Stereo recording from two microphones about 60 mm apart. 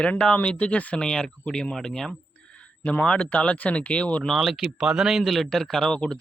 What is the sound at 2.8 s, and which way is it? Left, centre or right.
Speech, left.